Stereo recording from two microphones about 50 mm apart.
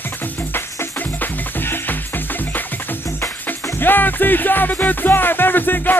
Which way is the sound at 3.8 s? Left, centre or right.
Left.